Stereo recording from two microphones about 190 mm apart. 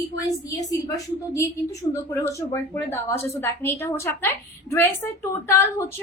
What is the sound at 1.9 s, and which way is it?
A woman's voice, 10° left (ahead or behind).